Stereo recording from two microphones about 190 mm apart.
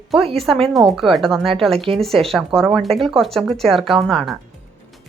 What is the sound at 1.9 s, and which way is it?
Speech, centre (ahead or behind).